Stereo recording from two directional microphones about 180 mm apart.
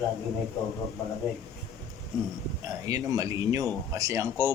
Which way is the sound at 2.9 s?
20° right (ahead or behind).